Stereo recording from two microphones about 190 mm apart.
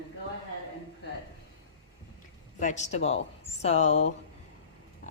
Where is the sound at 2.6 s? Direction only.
40° left (ahead or behind).